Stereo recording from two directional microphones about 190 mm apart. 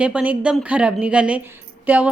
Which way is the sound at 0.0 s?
5° right (ahead or behind).